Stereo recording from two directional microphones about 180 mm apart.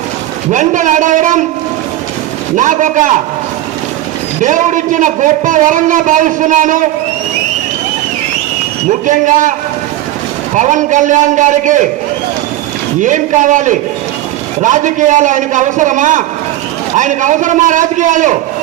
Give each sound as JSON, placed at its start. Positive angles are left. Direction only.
{"t": 0.5, "sound": "a man's voice", "side_deg": -45}
{"t": 2.6, "sound": "a man's voice", "side_deg": -45}
{"t": 4.4, "sound": "a man's voice", "side_deg": -45}
{"t": 8.9, "sound": "a man's voice", "side_deg": -45}
{"t": 13.0, "sound": "a man's voice", "side_deg": -45}